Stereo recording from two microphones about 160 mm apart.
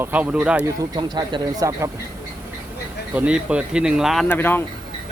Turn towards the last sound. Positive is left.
turn(degrees=15)  # may be behind; listen again after turning